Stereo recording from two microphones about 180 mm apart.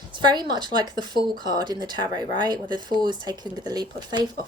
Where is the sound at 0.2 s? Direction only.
25° right (ahead or behind).